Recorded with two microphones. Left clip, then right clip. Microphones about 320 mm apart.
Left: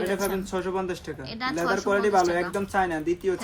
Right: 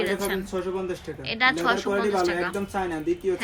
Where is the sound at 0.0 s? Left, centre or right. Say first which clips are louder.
Right 1 dB; centre.